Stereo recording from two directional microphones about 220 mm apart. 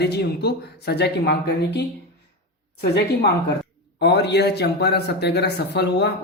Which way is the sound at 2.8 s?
45° left (ahead or behind).